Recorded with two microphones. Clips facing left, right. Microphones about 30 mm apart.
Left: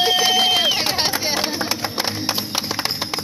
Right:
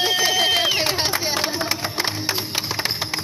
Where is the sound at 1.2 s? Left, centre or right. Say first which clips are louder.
Left 1 dB; left.